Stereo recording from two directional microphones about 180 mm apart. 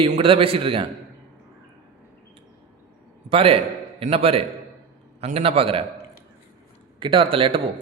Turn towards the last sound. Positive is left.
turn(degrees=-30)  # may be behind; listen again after turning